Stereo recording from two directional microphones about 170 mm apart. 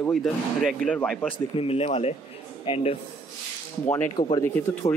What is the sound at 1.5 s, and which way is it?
Speech, 35° left (ahead or behind).